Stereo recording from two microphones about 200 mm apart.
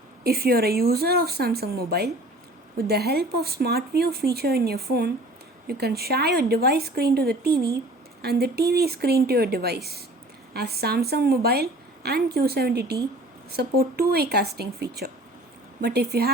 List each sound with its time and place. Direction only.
0.3 s a woman's voice: 50° right (ahead or behind)